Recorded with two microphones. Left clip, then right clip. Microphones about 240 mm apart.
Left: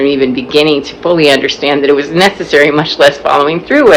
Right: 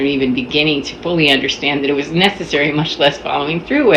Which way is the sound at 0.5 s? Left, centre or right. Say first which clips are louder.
Left 8 dB; centre.